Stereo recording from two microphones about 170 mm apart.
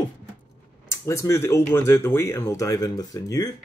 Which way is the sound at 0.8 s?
15° left (ahead or behind).